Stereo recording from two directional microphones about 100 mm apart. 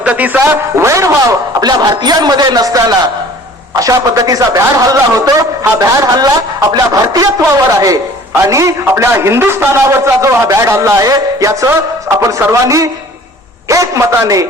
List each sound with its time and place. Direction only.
0.0 s a man's voice: 15° right (ahead or behind); by 14.4 s 35° right (ahead or behind)